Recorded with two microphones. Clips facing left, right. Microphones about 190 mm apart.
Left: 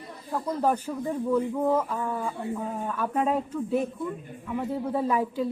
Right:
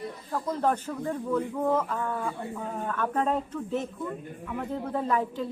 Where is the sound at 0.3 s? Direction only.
10° left (ahead or behind).